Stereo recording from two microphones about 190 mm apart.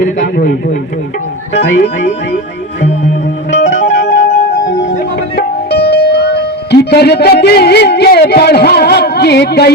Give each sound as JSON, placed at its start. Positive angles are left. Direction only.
{"t": 0.3, "sound": "speech", "side_deg": 45}
{"t": 3.6, "sound": "music", "side_deg": 40}
{"t": 5.4, "sound": "speech", "side_deg": 60}